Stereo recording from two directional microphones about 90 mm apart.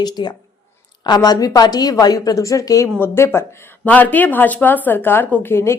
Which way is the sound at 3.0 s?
30° left (ahead or behind).